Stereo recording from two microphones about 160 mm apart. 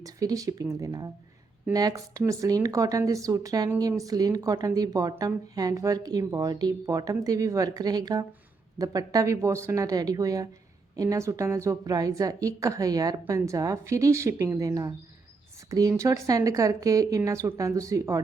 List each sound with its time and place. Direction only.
0.0 s speech: 20° right (ahead or behind)